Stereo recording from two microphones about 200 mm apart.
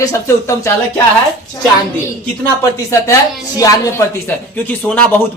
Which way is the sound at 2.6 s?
15° left (ahead or behind).